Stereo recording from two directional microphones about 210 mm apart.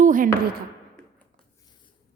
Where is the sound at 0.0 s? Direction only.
40° right (ahead or behind).